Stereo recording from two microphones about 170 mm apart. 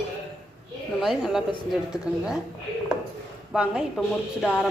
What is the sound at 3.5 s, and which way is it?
Speech, 5° right (ahead or behind).